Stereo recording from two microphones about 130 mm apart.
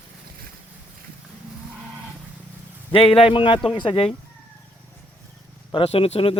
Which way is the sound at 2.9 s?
45° left (ahead or behind).